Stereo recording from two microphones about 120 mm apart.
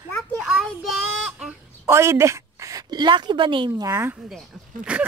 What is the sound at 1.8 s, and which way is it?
A woman's voice, 20° right (ahead or behind).